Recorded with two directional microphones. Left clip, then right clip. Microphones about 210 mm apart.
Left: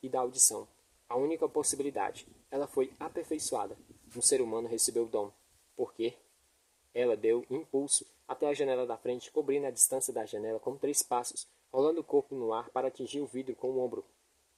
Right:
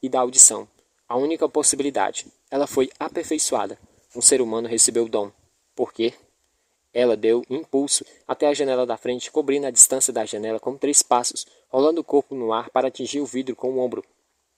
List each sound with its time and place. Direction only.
0.0 s speech: 40° right (ahead or behind)